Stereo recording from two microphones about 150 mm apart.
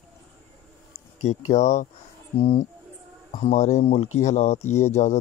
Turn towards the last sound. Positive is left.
turn(degrees=50)  # may be behind; listen again after turning